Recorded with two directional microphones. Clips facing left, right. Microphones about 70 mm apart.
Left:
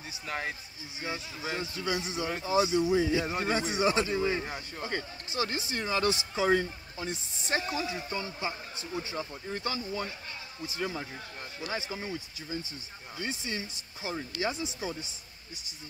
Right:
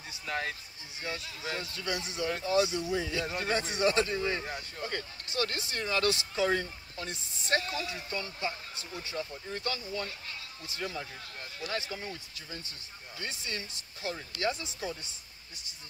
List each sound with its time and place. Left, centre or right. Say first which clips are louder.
0.3 s speech: right 1 dB; centre